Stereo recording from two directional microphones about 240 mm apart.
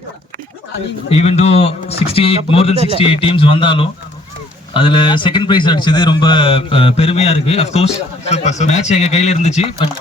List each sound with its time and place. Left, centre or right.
1.1 s a man's voice: left
2.7 s a man's voice: right
3.0 s a man's voice: left